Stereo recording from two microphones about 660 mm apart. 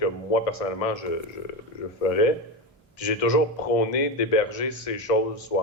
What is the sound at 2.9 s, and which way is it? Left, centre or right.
Speech, left.